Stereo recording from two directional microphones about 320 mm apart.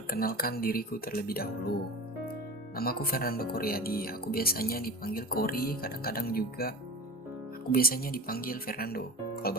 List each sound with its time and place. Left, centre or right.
0.1 s speech: left
2.7 s speech: left